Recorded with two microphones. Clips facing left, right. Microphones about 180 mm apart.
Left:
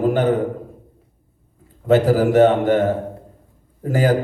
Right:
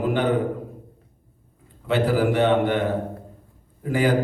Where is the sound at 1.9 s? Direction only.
40° left (ahead or behind).